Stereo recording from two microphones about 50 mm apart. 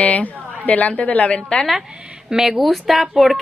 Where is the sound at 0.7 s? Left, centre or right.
Left.